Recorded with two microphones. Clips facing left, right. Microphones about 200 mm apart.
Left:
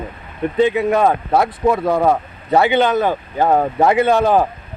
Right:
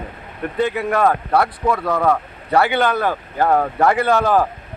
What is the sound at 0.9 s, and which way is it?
Speech, 20° left (ahead or behind).